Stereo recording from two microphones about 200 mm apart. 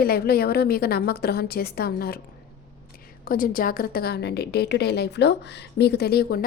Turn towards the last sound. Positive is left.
turn(degrees=50)  # may be behind; listen again after turning